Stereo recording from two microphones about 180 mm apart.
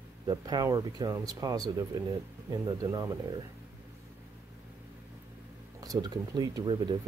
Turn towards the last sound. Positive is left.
turn(degrees=-25)  # may be behind; listen again after turning